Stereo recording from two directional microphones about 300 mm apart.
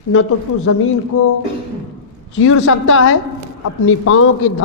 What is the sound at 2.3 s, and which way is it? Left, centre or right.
A man's voice, left.